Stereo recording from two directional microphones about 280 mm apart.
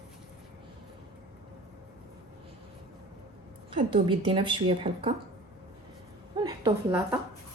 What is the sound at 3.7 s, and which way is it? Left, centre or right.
A woman's voice, centre.